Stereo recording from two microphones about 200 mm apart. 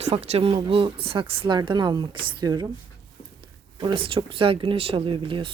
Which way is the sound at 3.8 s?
25° right (ahead or behind).